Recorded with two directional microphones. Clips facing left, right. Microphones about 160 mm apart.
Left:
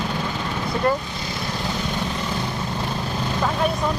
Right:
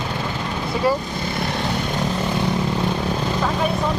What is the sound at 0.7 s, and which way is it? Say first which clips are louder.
Speech: right 1 dB; 5° right (ahead or behind).